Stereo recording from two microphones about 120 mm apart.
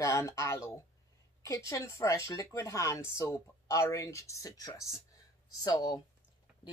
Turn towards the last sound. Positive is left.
turn(degrees=35)  # may be behind; listen again after turning